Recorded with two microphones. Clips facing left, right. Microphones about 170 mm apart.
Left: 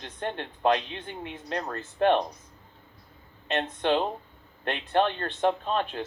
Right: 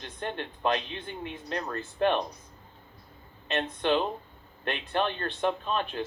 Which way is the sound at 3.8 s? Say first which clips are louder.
Left 1 dB; 30° left (ahead or behind).